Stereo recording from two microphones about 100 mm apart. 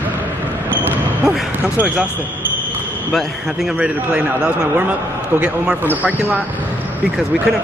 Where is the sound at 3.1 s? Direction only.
5° right (ahead or behind).